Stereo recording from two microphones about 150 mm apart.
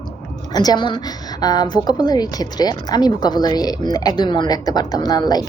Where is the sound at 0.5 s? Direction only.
25° left (ahead or behind).